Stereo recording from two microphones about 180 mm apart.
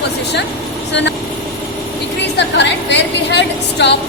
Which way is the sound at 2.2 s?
70° left (ahead or behind).